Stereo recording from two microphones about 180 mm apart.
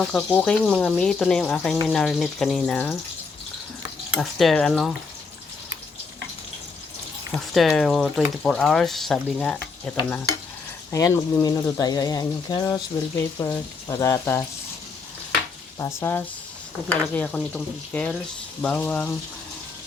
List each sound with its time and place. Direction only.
0.0 s speech: 5° left (ahead or behind)
4.1 s speech: centre (ahead or behind)
7.3 s speech: centre (ahead or behind)
15.8 s speech: 15° left (ahead or behind)